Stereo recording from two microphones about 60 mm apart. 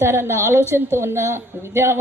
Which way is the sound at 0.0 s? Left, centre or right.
Right.